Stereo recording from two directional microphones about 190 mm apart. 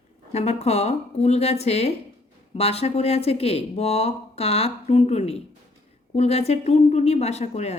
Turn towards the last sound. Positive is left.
turn(degrees=35)  # may be behind; listen again after turning